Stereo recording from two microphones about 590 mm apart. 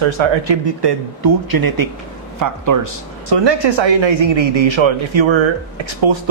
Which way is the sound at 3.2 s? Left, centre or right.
Right.